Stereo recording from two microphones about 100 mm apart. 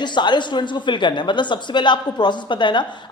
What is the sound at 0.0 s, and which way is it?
Speech, 50° left (ahead or behind).